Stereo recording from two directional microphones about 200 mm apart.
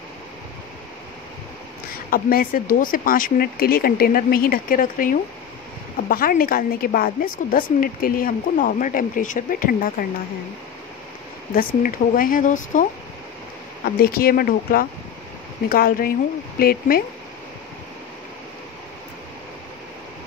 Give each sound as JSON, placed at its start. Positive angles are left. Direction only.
{"t": 1.9, "sound": "speech", "side_deg": 45}
{"t": 11.5, "sound": "speech", "side_deg": 45}
{"t": 13.9, "sound": "speech", "side_deg": 50}